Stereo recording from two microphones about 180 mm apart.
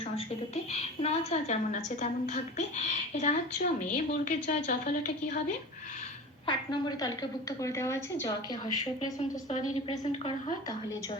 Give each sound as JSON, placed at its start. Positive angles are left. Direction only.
{"t": 0.5, "sound": "a woman's voice", "side_deg": 35}
{"t": 6.4, "sound": "a woman's voice", "side_deg": 25}